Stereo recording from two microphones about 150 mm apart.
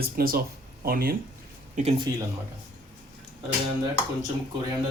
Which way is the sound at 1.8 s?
55° right (ahead or behind).